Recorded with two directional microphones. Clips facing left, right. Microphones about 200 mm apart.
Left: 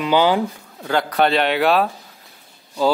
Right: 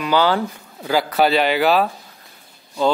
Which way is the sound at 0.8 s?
5° right (ahead or behind).